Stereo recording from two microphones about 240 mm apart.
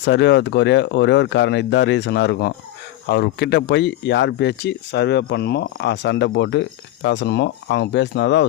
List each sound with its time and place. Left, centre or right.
0.0 s speech: left